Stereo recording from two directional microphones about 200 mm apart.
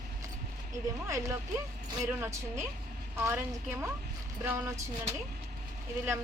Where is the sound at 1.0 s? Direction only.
15° right (ahead or behind).